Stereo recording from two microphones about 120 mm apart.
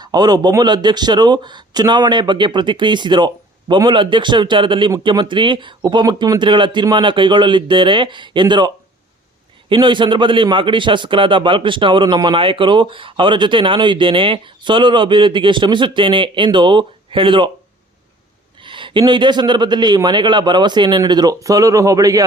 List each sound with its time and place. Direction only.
0.0 s a man's voice: 35° right (ahead or behind)
18.6 s speech: 45° right (ahead or behind); by 22.2 s 30° right (ahead or behind)